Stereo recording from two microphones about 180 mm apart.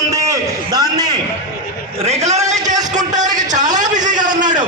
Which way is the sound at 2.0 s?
35° right (ahead or behind).